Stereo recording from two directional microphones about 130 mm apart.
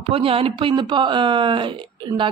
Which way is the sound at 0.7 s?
35° right (ahead or behind).